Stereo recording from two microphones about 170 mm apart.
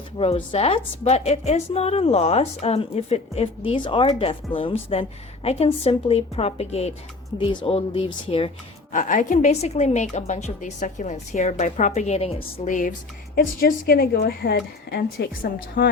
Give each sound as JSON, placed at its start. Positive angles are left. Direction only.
{"t": 0.2, "sound": "a woman's voice", "side_deg": 35}
{"t": 8.9, "sound": "a woman's voice", "side_deg": 50}
{"t": 12.6, "sound": "a woman's voice", "side_deg": 50}
{"t": 15.8, "sound": "a woman's voice", "side_deg": 55}